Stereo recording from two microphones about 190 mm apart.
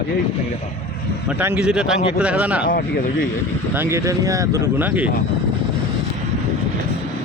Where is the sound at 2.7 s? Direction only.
50° left (ahead or behind).